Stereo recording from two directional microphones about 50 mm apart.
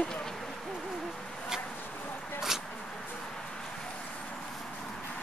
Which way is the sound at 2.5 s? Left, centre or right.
Centre.